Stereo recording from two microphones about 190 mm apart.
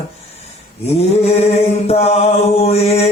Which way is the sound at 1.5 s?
35° left (ahead or behind).